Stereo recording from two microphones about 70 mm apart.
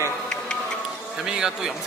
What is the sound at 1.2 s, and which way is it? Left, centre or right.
Speech, centre.